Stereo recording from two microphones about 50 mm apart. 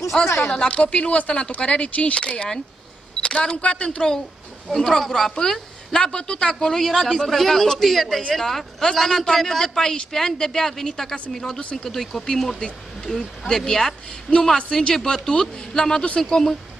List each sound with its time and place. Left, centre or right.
0.1 s speech: centre
0.7 s speech: left
4.7 s a man's voice: centre